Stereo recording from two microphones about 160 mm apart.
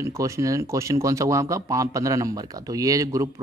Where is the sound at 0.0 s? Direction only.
20° right (ahead or behind).